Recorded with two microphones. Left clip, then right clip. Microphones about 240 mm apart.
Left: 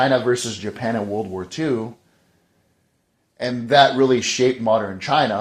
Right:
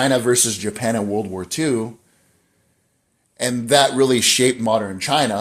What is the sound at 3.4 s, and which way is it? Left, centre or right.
Speech, right.